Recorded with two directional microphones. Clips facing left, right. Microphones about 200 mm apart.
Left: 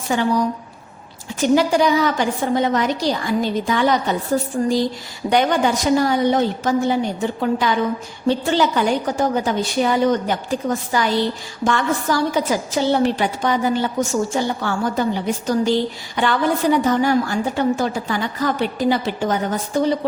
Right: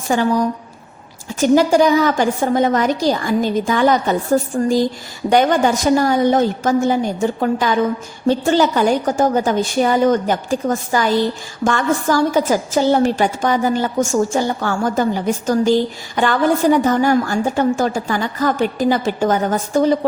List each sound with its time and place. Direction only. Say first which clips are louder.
0.1 s a woman's voice: right 2 dB; 45° right (ahead or behind)